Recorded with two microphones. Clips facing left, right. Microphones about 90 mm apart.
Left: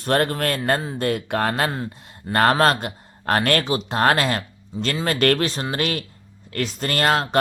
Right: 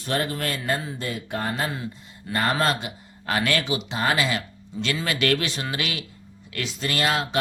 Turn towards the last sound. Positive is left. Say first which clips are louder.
# left 4 dB
turn(degrees=50)  # may be behind; listen again after turning